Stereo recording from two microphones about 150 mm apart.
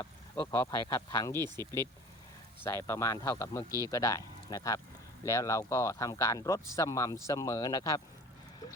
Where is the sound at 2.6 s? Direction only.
20° left (ahead or behind).